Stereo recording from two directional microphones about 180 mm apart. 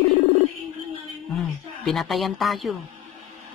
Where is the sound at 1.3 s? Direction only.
Centre (ahead or behind).